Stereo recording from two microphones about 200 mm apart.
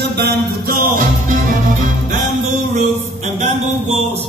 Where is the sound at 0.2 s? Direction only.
50° right (ahead or behind).